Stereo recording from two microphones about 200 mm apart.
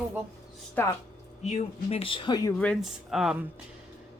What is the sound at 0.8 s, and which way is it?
Speech, 10° left (ahead or behind).